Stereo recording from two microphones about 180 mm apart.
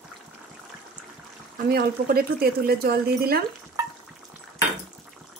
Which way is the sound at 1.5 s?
55° right (ahead or behind).